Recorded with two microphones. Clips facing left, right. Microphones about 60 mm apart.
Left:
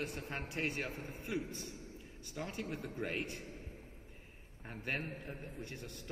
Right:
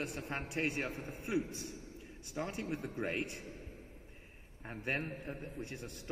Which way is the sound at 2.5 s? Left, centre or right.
Right.